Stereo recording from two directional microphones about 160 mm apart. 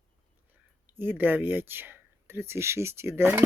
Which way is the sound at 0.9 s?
15° right (ahead or behind).